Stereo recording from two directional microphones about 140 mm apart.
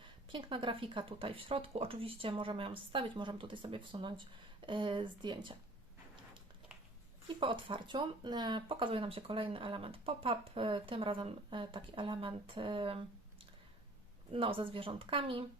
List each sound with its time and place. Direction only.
0.3 s speech: 40° right (ahead or behind)
7.3 s speech: 35° right (ahead or behind)